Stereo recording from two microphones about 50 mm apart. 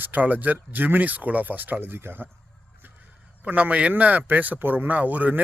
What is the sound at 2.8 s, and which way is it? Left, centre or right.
Speech, right.